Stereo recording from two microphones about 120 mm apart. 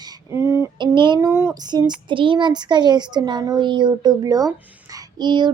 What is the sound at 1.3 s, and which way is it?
Child singing, 20° right (ahead or behind).